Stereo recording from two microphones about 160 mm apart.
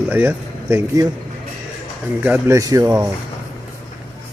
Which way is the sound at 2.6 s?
20° right (ahead or behind).